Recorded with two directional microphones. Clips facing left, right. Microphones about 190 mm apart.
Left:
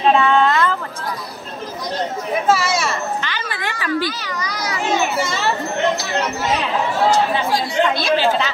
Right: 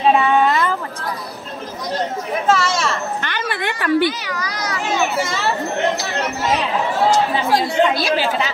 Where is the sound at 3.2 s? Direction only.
55° right (ahead or behind).